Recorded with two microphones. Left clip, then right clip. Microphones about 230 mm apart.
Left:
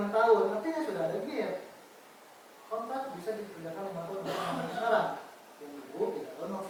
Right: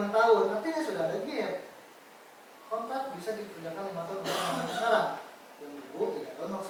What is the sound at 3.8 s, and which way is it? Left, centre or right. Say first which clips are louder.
Speech: right 2 dB; left.